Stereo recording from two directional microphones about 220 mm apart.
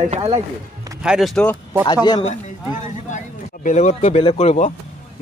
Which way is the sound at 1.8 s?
20° left (ahead or behind).